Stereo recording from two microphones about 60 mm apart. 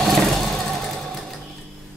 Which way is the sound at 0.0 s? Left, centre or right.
Centre.